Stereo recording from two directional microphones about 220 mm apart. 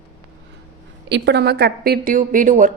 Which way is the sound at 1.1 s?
50° right (ahead or behind).